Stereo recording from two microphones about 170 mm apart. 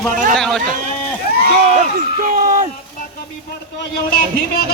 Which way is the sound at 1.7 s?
50° right (ahead or behind).